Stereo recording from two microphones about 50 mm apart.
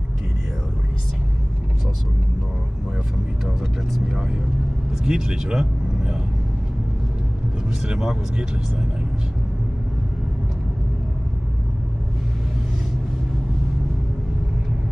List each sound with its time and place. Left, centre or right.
5.0 s speech: centre
7.9 s speech: centre